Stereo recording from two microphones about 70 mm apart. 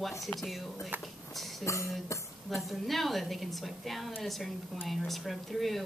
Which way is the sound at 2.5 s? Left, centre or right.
Centre.